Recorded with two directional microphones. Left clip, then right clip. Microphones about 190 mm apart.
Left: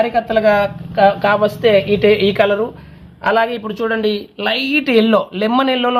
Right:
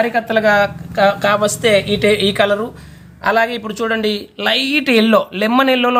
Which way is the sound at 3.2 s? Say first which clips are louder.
Even; centre (ahead or behind).